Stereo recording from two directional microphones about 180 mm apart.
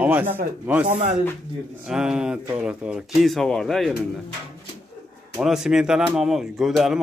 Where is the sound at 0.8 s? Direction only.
40° right (ahead or behind).